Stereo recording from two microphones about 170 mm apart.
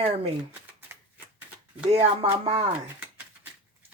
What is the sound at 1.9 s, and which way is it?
Speech, 35° right (ahead or behind).